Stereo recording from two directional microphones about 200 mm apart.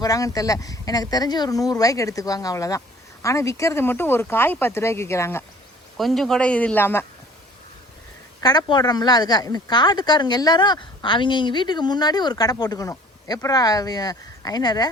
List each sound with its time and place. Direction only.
0.0 s speech: 15° left (ahead or behind)
6.0 s speech: centre (ahead or behind)
8.4 s speech: 20° left (ahead or behind)